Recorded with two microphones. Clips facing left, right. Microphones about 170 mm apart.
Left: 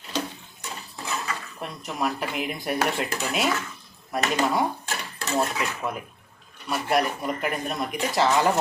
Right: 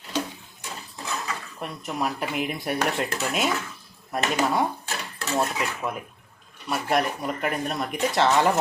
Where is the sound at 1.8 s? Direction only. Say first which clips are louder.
Even; centre (ahead or behind).